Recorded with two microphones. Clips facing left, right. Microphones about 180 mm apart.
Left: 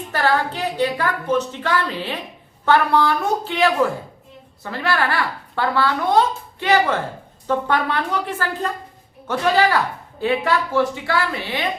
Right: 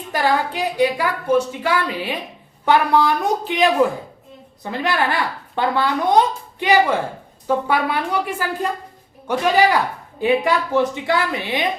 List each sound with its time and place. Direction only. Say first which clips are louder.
0.1 s a woman's voice: right 1 dB; 15° right (ahead or behind)